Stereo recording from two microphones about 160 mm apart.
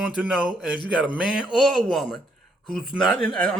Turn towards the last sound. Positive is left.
turn(degrees=10)  # may be behind; listen again after turning